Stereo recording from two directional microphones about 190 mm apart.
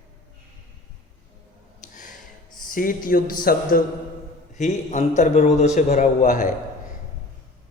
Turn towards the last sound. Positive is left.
turn(degrees=40)  # may be behind; listen again after turning